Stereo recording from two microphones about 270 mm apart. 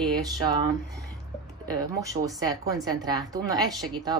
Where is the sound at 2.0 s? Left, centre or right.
Centre.